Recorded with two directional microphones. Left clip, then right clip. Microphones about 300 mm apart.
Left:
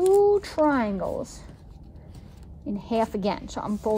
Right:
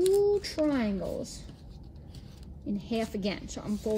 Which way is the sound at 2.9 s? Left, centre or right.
Centre.